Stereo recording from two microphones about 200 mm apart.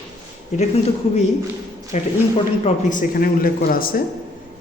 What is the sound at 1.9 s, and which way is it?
A woman's voice, 35° left (ahead or behind).